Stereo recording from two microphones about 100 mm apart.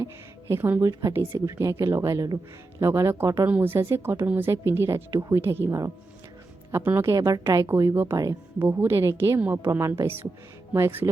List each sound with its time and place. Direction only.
0.0 s speech: 25° right (ahead or behind)
7.1 s speech: 35° right (ahead or behind)
8.5 s speech: 25° right (ahead or behind)